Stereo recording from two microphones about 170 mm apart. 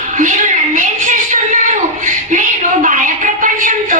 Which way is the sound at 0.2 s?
50° right (ahead or behind).